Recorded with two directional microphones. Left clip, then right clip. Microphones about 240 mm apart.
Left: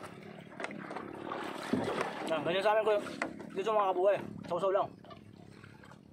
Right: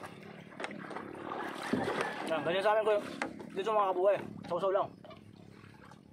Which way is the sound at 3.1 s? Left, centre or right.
Right.